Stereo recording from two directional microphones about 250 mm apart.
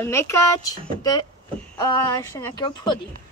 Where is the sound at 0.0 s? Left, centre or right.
Centre.